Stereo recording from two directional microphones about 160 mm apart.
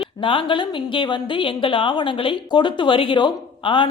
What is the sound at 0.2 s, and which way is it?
A woman's voice, 30° left (ahead or behind).